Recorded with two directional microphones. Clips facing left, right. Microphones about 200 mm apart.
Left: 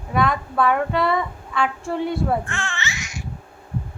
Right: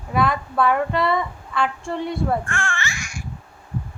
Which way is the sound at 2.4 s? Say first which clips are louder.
Right 2 dB; 20° left (ahead or behind).